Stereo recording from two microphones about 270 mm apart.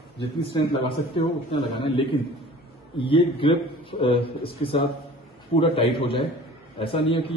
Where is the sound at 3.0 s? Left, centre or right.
Centre.